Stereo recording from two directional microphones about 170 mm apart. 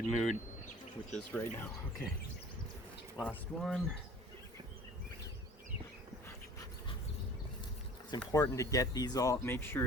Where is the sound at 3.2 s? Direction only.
Centre (ahead or behind).